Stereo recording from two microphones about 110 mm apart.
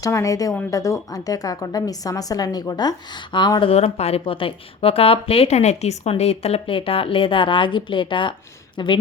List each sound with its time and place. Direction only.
0.0 s a woman's voice: 30° left (ahead or behind)
3.7 s a woman's voice: 70° left (ahead or behind); by 9.0 s 45° left (ahead or behind)